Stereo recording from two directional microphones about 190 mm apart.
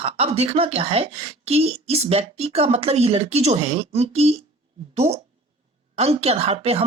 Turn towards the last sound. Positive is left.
turn(degrees=-30)  # may be behind; listen again after turning